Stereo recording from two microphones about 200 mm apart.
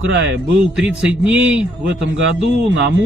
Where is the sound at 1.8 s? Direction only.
70° right (ahead or behind).